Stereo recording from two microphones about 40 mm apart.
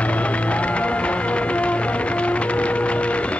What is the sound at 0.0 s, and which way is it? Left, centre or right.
Music, left.